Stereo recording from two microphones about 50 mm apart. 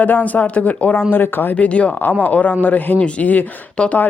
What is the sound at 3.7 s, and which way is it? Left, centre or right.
Speech, left.